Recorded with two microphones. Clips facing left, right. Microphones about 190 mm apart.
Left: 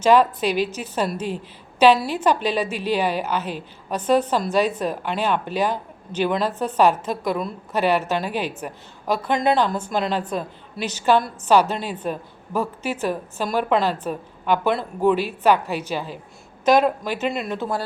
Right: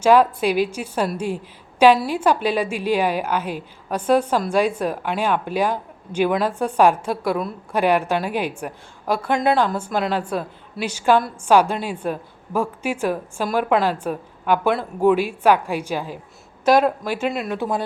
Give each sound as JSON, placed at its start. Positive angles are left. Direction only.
{"t": 0.0, "sound": "a woman's voice", "side_deg": -10}
{"t": 17.6, "sound": "a woman's voice", "side_deg": -20}